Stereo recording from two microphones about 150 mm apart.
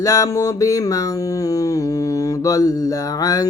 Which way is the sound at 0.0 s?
25° left (ahead or behind).